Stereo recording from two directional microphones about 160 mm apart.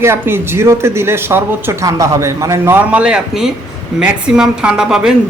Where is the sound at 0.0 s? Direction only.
15° right (ahead or behind).